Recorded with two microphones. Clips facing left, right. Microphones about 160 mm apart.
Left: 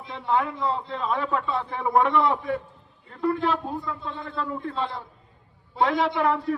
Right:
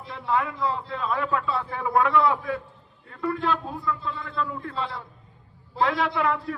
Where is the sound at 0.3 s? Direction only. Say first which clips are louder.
Left 1 dB; 30° left (ahead or behind).